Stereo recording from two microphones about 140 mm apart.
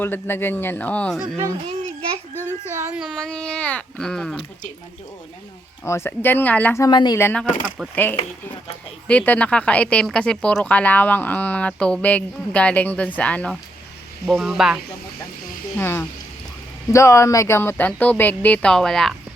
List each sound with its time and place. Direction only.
0.0 s speech: 15° left (ahead or behind)
1.8 s a sound: 55° right (ahead or behind)
2.4 s a sound: 20° right (ahead or behind)
2.9 s speech: 5° right (ahead or behind)
5.8 s speech: 20° left (ahead or behind)
6.8 s a woman's voice: 30° left (ahead or behind)
7.2 s speech: 15° left (ahead or behind)
9.0 s speech: 10° left (ahead or behind)
14.3 s speech: centre (ahead or behind)
15.8 s speech: 15° left (ahead or behind)